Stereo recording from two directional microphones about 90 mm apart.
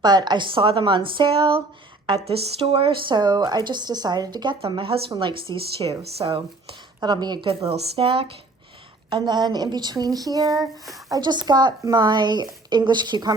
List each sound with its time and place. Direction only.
0.0 s a woman's voice: 50° right (ahead or behind)
4.8 s speech: 90° right
5.2 s speech: 75° right (ahead or behind); by 6.2 s 90° right
7.0 s a woman's voice: 50° right (ahead or behind)
7.4 s speech: 80° right
9.0 s a woman's voice: 60° right (ahead or behind)